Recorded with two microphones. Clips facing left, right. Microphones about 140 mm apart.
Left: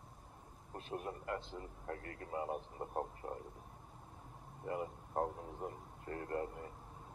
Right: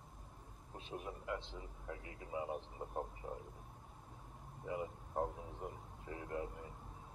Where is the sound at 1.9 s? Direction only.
60° left (ahead or behind).